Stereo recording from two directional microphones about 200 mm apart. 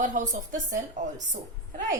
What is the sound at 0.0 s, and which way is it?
Speech, 40° right (ahead or behind).